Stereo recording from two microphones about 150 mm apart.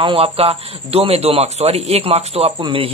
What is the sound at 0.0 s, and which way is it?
A man's voice, 40° right (ahead or behind).